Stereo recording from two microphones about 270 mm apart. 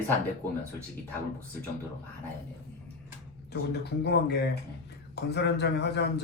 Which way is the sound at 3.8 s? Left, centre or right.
Left.